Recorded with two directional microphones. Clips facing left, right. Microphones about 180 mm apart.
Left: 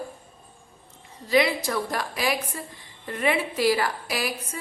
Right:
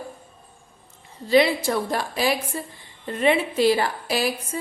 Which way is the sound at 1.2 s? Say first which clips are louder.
Right 4 dB; 30° right (ahead or behind).